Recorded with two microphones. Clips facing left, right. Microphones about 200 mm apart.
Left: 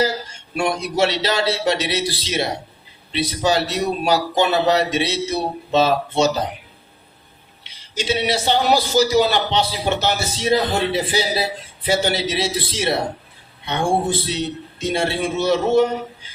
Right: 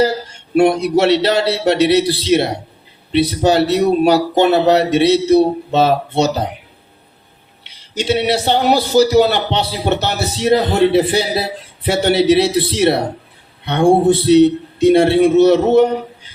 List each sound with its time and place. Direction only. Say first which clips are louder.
0.5 s a man's voice: right 10 dB; 60° right (ahead or behind)
7.6 s a man's voice: right 5 dB; 60° right (ahead or behind)